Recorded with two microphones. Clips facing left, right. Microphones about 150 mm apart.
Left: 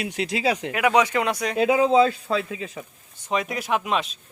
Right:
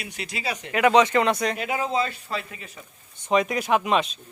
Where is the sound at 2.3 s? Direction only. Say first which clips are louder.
Left 7 dB; 90° left.